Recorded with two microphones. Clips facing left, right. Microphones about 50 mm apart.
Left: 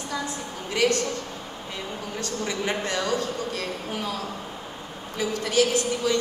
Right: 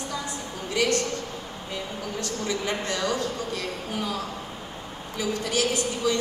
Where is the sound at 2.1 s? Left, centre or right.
Left.